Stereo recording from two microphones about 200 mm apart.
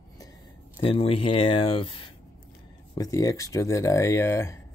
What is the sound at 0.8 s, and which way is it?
Speech, 25° left (ahead or behind).